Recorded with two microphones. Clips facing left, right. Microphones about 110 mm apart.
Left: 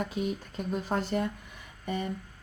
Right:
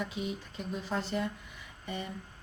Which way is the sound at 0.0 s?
50° left (ahead or behind).